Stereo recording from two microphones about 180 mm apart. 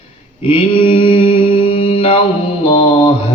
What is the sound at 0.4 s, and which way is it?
Mantra, 30° left (ahead or behind).